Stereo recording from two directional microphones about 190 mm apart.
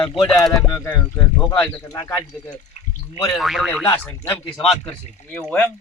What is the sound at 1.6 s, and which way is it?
Speech, 15° left (ahead or behind).